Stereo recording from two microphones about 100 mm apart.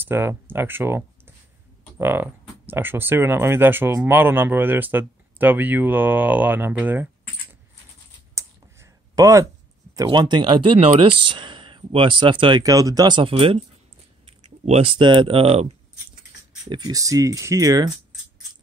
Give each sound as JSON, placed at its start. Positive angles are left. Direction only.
{"t": 0.0, "sound": "speech", "side_deg": -20}
{"t": 8.4, "sound": "a sound", "side_deg": -30}
{"t": 10.0, "sound": "speech", "side_deg": -50}
{"t": 10.8, "sound": "speech", "side_deg": -65}
{"t": 12.6, "sound": "speech", "side_deg": -35}
{"t": 13.2, "sound": "speech", "side_deg": -60}
{"t": 14.2, "sound": "speech", "side_deg": -90}
{"t": 16.6, "sound": "speech", "side_deg": -45}